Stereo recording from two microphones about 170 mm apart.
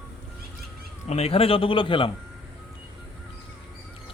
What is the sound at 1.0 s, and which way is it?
A man's voice, 40° left (ahead or behind).